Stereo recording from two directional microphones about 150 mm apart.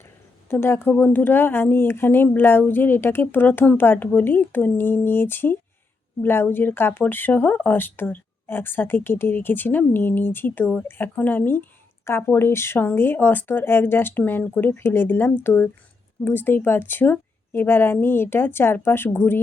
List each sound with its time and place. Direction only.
0.5 s speech: 15° left (ahead or behind)